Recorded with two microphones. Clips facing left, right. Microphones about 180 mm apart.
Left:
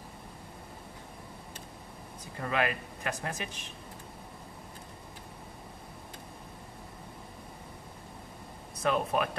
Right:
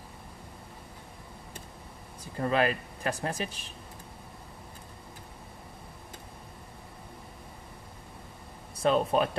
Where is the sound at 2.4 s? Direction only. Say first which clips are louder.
Right 4 dB; 35° right (ahead or behind).